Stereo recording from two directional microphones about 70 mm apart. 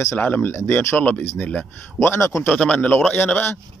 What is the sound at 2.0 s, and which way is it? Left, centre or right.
Speech, left.